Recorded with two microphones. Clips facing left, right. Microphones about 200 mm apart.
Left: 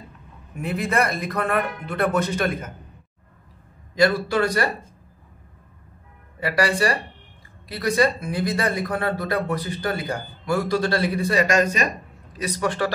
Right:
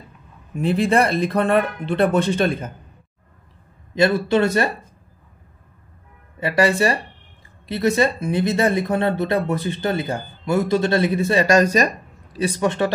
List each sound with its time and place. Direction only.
0.6 s speech: 30° right (ahead or behind)
3.9 s speech: 25° right (ahead or behind)
6.4 s speech: 25° right (ahead or behind)